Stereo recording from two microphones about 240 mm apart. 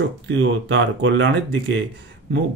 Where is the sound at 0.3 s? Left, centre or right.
Right.